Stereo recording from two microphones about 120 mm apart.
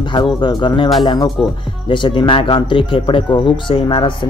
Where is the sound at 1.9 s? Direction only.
40° left (ahead or behind).